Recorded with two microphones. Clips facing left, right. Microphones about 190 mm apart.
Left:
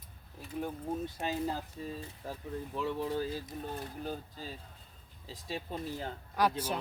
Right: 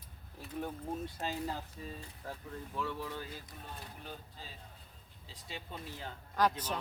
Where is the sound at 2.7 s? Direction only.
25° left (ahead or behind).